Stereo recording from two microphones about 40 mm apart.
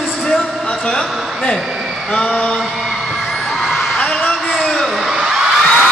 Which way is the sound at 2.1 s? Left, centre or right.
Left.